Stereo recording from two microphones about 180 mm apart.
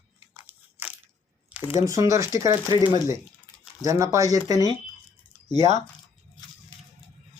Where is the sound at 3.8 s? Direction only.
20° right (ahead or behind).